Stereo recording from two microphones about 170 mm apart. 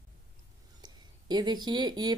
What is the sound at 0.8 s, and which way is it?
Speech, 25° right (ahead or behind).